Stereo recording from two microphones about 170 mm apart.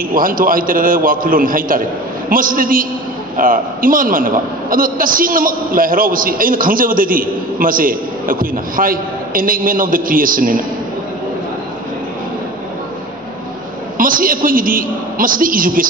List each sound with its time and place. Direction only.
0.1 s a man's voice: 55° right (ahead or behind)
14.0 s a man's voice: 55° right (ahead or behind)